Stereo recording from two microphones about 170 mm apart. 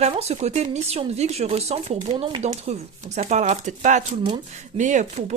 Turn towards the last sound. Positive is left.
turn(degrees=-45)  # may be behind; listen again after turning